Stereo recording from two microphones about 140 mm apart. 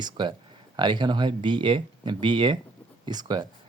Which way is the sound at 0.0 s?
35° right (ahead or behind).